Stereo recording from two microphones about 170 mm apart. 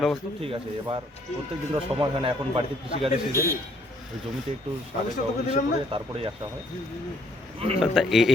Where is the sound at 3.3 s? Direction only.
15° right (ahead or behind).